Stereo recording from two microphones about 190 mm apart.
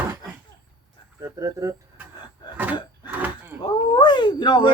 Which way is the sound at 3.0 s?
10° right (ahead or behind).